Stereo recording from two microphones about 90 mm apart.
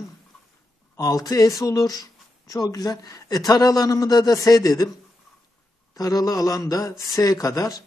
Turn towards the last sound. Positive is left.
turn(degrees=40)  # may be behind; listen again after turning